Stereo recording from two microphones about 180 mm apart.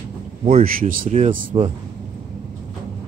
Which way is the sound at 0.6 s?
50° right (ahead or behind).